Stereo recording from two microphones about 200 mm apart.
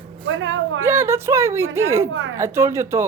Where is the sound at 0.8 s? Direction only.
10° right (ahead or behind).